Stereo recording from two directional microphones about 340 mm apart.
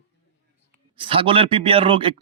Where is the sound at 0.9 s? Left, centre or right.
Centre.